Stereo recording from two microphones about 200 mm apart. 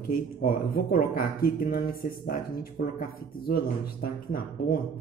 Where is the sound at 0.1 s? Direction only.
45° left (ahead or behind).